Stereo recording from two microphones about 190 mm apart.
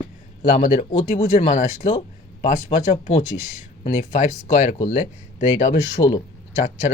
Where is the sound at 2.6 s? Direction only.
30° left (ahead or behind).